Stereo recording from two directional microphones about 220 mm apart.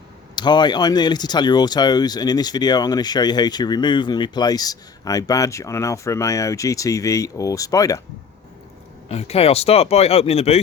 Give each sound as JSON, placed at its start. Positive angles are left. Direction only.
{"t": 0.3, "sound": "speech", "side_deg": 20}
{"t": 9.0, "sound": "speech", "side_deg": 25}